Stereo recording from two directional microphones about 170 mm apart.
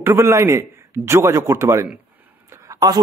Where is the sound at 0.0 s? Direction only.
15° right (ahead or behind).